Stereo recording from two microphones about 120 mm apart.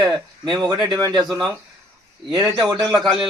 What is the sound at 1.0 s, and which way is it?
Speech, 30° right (ahead or behind).